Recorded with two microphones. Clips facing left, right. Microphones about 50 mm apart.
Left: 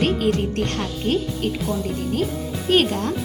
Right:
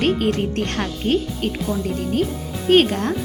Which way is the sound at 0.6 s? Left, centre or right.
Right.